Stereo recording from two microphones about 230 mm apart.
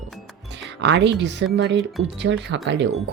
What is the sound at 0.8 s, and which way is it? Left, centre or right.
Speech, right.